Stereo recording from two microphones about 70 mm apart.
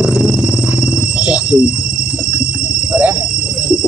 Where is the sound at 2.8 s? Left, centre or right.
Centre.